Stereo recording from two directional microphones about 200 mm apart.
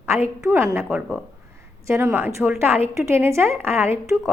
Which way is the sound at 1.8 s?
10° right (ahead or behind).